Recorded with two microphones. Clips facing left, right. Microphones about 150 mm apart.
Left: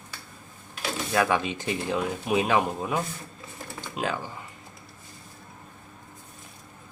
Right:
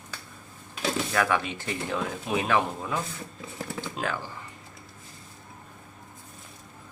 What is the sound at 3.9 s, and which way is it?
Speech, 15° left (ahead or behind).